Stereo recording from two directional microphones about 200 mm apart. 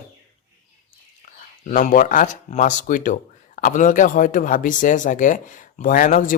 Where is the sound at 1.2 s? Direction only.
40° left (ahead or behind).